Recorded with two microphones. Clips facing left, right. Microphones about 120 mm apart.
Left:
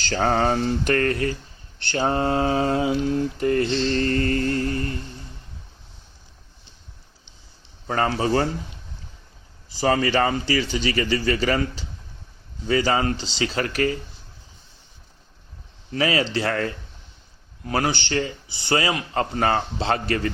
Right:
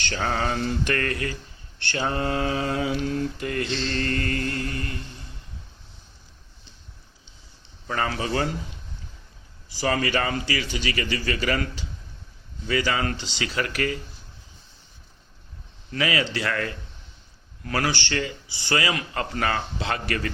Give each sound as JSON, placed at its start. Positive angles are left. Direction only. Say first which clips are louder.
{"t": 0.0, "sound": "mantra", "louder": "left 6 dB", "side_deg": 40}
{"t": 7.9, "sound": "mantra", "louder": "left 5 dB", "side_deg": 35}
{"t": 9.8, "sound": "mantra", "louder": "left 4 dB", "side_deg": 30}
{"t": 16.0, "sound": "mantra", "louder": "left 3 dB", "side_deg": 35}